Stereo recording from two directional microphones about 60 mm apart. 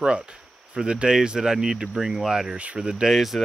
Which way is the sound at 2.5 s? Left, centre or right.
Centre.